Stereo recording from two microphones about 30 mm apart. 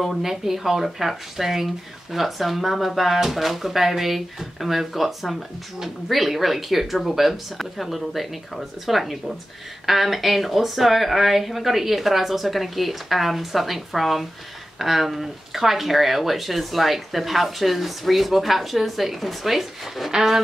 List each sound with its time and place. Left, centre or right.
0.2 s speech: centre
20.1 s speech: centre